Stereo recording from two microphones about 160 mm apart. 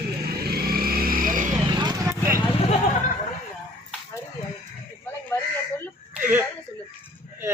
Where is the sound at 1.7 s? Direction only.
25° right (ahead or behind).